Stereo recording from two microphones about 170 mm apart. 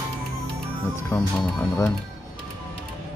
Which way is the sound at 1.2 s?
5° left (ahead or behind).